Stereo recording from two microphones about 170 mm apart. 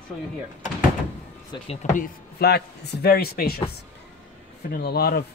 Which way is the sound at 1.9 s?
60° left (ahead or behind).